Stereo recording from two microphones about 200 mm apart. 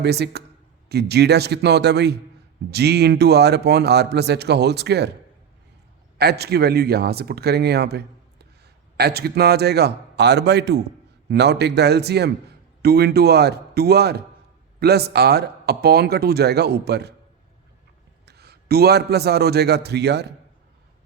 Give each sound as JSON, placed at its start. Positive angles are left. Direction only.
{"t": 0.0, "sound": "a man's voice", "side_deg": -55}
{"t": 6.1, "sound": "a man's voice", "side_deg": -55}
{"t": 18.3, "sound": "a man's voice", "side_deg": -55}